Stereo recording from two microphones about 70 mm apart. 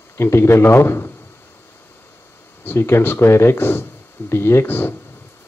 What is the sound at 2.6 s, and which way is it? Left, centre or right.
Speech, left.